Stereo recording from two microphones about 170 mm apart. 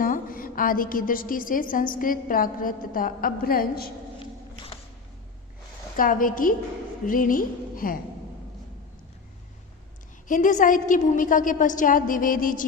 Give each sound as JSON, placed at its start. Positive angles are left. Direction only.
{"t": 0.0, "sound": "a woman's voice", "side_deg": 55}
{"t": 4.2, "sound": "a sound", "side_deg": 30}
{"t": 6.0, "sound": "a woman's voice", "side_deg": 55}
{"t": 10.2, "sound": "a woman's voice", "side_deg": 50}